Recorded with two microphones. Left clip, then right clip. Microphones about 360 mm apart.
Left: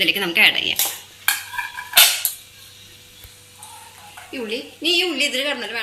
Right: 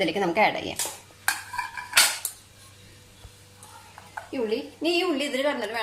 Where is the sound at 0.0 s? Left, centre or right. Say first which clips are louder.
Left 6 dB; centre.